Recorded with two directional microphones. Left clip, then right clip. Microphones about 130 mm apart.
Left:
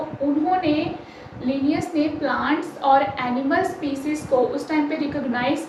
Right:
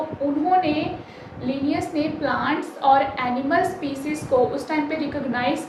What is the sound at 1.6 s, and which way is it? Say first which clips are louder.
A woman's voice: left 1 dB; 35° right (ahead or behind).